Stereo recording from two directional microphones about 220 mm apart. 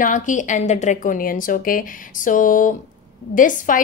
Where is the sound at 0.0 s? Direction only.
35° left (ahead or behind).